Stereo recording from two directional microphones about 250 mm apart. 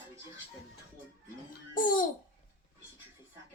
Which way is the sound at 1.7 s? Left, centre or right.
Left.